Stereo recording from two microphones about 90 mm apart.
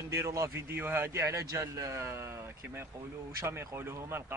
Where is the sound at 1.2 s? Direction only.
35° right (ahead or behind).